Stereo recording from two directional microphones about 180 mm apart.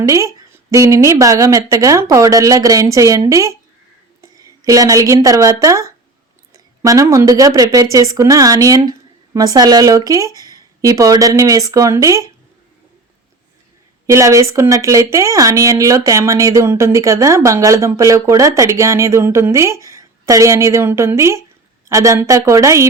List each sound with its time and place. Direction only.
0.0 s a woman's voice: 20° right (ahead or behind)
14.1 s speech: 15° right (ahead or behind)